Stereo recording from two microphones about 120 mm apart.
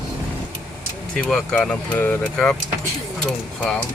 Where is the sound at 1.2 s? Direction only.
5° left (ahead or behind).